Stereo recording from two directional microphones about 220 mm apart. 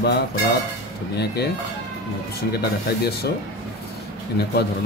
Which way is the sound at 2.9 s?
50° left (ahead or behind).